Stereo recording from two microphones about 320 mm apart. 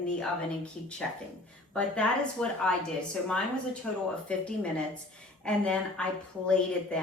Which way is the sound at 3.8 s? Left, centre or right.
Centre.